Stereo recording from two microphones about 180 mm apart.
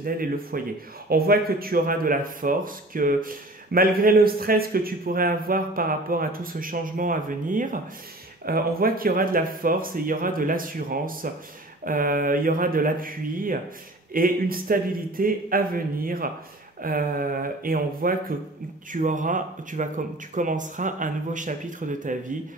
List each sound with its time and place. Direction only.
0.0 s speech: 55° right (ahead or behind)